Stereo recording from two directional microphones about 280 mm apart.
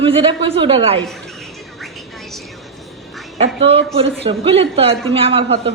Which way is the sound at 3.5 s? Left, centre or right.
Right.